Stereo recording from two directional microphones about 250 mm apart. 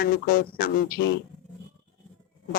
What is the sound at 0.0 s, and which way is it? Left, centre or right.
Speech, left.